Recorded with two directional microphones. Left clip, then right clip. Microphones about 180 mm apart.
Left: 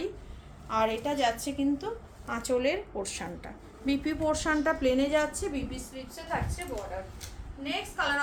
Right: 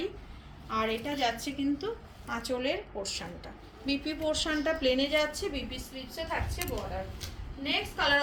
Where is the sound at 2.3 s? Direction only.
60° left (ahead or behind); by 5.5 s 25° left (ahead or behind).